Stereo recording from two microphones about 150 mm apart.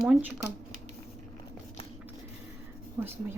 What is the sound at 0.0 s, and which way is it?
Speech, 10° right (ahead or behind).